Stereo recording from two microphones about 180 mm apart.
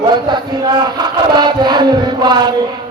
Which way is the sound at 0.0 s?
25° right (ahead or behind).